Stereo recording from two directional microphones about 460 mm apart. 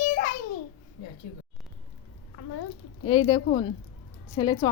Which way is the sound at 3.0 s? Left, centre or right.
Centre.